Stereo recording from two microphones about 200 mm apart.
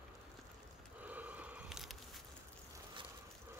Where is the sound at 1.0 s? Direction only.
10° right (ahead or behind).